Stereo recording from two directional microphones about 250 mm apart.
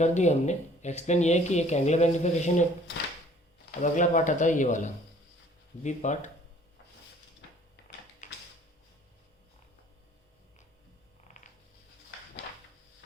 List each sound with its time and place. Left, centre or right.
0.0 s speech: left
3.7 s speech: left
8.2 s a sound: left